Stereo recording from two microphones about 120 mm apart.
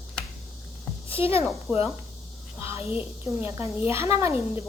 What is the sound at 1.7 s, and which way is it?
A child's voice, 10° right (ahead or behind).